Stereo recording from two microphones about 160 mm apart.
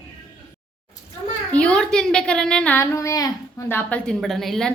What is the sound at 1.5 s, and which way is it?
A woman's voice, 5° left (ahead or behind).